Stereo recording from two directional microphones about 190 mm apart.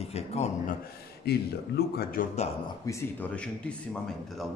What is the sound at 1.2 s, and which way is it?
A man's voice, 55° left (ahead or behind).